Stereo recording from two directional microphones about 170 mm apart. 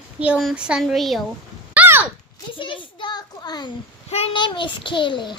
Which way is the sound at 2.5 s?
30° left (ahead or behind).